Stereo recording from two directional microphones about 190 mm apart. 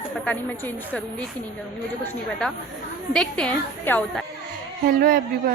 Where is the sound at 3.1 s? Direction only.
5° left (ahead or behind).